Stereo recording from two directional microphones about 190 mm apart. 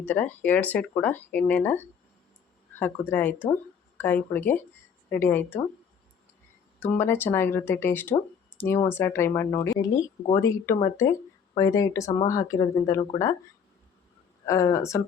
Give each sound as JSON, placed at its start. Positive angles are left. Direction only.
{"t": 0.0, "sound": "speech", "side_deg": 10}
{"t": 6.7, "sound": "speech", "side_deg": 10}
{"t": 14.4, "sound": "speech", "side_deg": 15}